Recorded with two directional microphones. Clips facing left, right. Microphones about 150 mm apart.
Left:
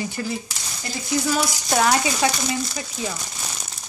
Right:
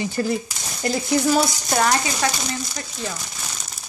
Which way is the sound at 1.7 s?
Centre (ahead or behind).